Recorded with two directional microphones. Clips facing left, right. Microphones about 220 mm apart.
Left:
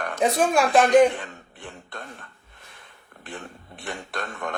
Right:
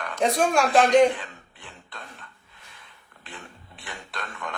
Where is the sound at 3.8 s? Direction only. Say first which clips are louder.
Left 6 dB; 50° left (ahead or behind).